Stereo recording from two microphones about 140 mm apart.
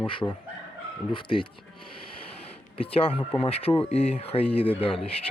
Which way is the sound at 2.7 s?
40° left (ahead or behind).